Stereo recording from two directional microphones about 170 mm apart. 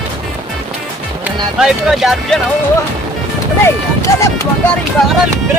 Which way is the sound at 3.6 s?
15° left (ahead or behind).